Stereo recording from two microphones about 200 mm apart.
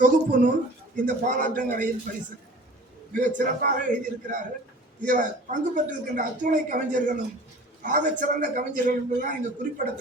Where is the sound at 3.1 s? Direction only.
40° right (ahead or behind).